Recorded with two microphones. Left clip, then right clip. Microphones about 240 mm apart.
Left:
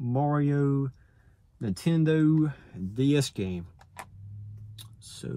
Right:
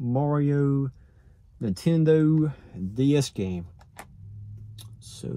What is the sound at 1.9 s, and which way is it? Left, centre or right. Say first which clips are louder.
Speech: right 4 dB; left.